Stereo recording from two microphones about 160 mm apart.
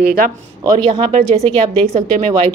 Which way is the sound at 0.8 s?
45° right (ahead or behind).